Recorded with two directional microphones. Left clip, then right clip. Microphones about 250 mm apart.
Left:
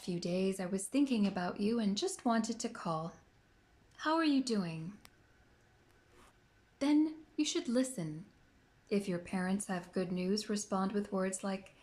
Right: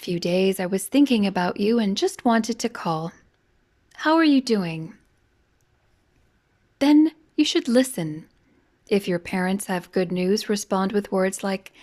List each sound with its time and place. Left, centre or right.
0.0 s speech: right
6.7 s a woman's voice: right